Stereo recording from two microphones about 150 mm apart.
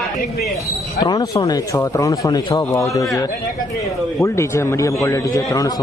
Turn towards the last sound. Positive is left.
turn(degrees=20)  # may be behind; listen again after turning